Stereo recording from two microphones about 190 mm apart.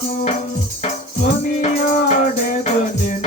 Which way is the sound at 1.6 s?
40° left (ahead or behind).